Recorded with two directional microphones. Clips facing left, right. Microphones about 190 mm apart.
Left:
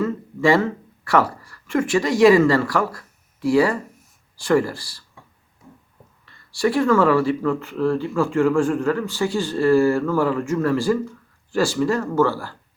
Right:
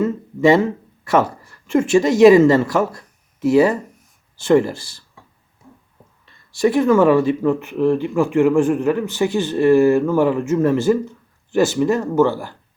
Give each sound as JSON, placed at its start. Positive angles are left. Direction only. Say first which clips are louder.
{"t": 0.0, "sound": "speech", "louder": "right 4 dB", "side_deg": -20}
{"t": 6.2, "sound": "speech", "louder": "right 4 dB", "side_deg": -20}